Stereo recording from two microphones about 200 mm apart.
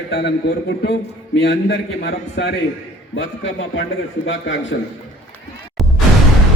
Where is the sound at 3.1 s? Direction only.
70° left (ahead or behind).